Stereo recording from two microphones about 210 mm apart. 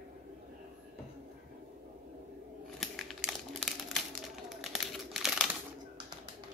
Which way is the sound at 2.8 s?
Centre (ahead or behind).